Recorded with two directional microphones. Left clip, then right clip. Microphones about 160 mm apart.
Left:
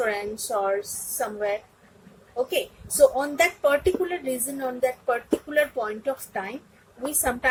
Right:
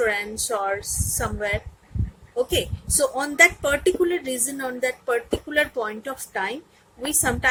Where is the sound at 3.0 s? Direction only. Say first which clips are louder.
Right 1 dB; 45° right (ahead or behind).